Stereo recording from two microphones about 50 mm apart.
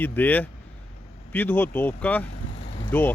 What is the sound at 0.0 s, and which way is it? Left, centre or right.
Speech, left.